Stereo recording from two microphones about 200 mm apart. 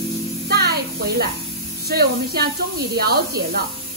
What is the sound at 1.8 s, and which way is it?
Speech, 50° right (ahead or behind).